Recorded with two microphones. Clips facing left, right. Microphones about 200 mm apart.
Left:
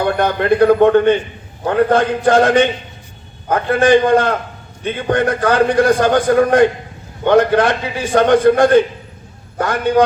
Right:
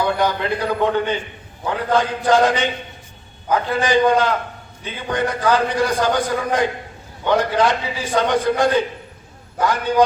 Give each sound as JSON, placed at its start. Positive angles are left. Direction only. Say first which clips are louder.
{"t": 0.0, "sound": "a man's voice", "louder": "left 4 dB", "side_deg": 55}